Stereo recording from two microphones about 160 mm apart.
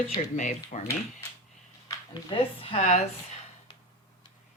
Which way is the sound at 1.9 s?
30° left (ahead or behind).